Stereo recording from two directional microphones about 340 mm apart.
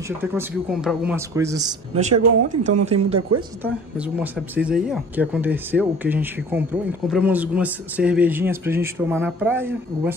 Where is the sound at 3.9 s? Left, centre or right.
Centre.